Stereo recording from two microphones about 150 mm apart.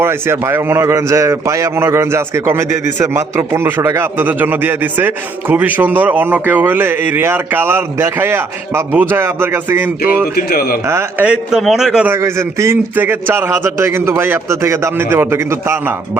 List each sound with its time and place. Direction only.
0.0 s a man's voice: 15° right (ahead or behind)
10.3 s speech: 90° left
10.8 s a man's voice: 15° right (ahead or behind)
12.1 s a man's voice: 20° right (ahead or behind)